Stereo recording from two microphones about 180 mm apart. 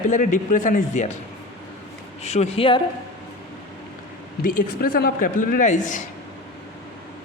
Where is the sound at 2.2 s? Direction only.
40° left (ahead or behind).